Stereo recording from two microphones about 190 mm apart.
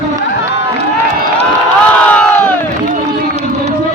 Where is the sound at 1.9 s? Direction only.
5° left (ahead or behind).